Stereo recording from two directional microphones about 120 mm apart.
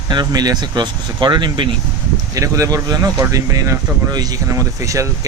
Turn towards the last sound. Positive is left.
turn(degrees=-25)  # may be behind; listen again after turning